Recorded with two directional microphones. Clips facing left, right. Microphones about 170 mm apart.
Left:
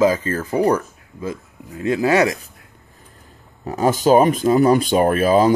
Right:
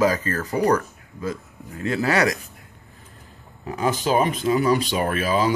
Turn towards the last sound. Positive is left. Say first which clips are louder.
# left 7 dB
turn(degrees=45)  # may be behind; listen again after turning